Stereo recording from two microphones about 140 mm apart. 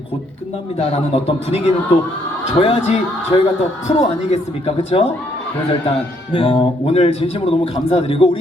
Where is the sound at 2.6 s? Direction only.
45° left (ahead or behind).